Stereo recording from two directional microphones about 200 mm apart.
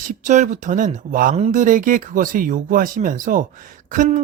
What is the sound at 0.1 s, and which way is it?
Speech, 40° right (ahead or behind).